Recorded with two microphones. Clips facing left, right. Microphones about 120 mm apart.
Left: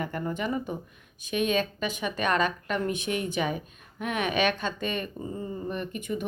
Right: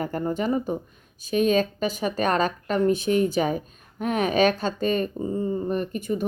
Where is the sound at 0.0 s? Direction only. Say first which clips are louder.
Right 5 dB; 35° right (ahead or behind).